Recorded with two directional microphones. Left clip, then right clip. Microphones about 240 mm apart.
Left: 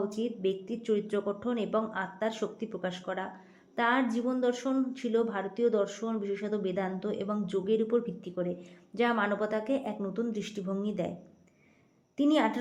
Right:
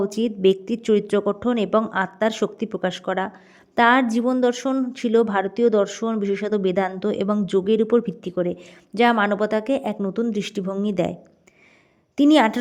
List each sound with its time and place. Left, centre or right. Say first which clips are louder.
0.0 s speech: right 12 dB; right
12.1 s a woman's voice: right 11 dB; right